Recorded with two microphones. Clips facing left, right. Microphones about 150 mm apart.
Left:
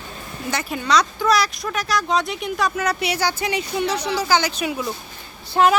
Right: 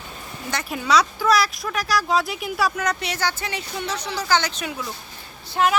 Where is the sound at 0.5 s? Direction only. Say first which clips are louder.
Even; centre (ahead or behind).